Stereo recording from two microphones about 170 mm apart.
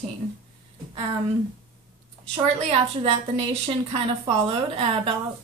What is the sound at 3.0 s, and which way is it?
A woman's voice, 35° right (ahead or behind).